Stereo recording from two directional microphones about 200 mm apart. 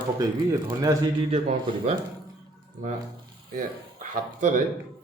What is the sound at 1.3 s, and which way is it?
Speech, 30° right (ahead or behind).